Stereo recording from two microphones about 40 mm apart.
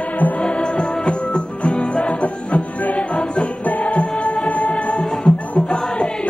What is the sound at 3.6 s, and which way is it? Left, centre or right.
Music, left.